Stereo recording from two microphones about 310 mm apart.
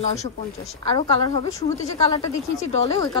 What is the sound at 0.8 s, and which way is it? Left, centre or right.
Speech, centre.